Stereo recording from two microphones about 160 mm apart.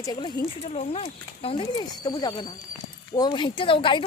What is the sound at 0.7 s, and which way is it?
Speech, 40° left (ahead or behind).